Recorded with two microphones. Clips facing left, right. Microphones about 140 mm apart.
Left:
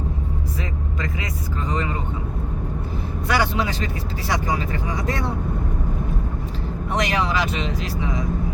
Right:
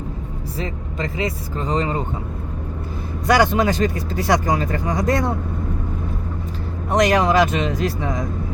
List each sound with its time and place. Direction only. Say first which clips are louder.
0.6 s speech: right 6 dB; 30° right (ahead or behind)
3.2 s speech: right 6 dB; 40° right (ahead or behind)
6.9 s speech: right 7 dB; 45° right (ahead or behind)